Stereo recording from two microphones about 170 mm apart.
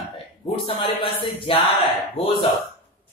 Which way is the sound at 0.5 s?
35° left (ahead or behind).